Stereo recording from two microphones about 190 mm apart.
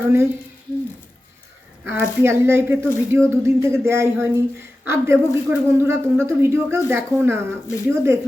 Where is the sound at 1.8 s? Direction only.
10° right (ahead or behind).